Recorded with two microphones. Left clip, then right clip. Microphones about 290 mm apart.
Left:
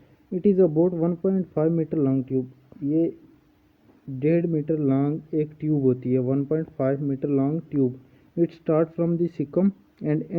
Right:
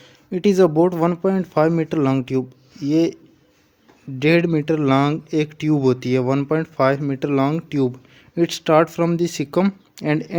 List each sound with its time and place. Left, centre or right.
0.4 s speech: centre
4.2 s speech: centre